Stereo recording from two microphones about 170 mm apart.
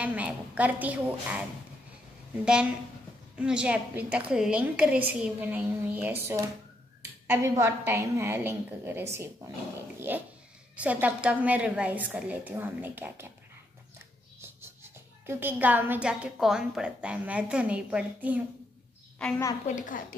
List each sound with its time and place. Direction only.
0.0 s a woman's voice: 10° right (ahead or behind)
2.4 s a woman's voice: 5° right (ahead or behind)
14.4 s a woman's voice: 15° right (ahead or behind)
19.2 s a woman's voice: 5° left (ahead or behind)
19.7 s a child's voice: 50° left (ahead or behind)